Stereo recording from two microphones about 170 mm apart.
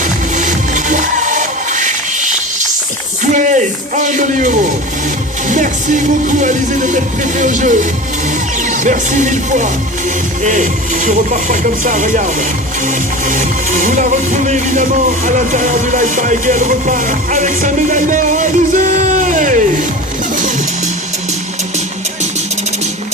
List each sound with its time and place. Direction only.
0.0 s music: 45° right (ahead or behind)
3.3 s speech: 50° right (ahead or behind)
5.5 s music: 50° right (ahead or behind)